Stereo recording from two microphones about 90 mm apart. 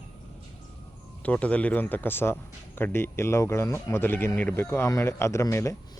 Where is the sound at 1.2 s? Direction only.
15° left (ahead or behind).